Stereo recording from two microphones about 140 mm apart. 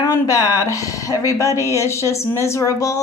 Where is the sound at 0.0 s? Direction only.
25° left (ahead or behind).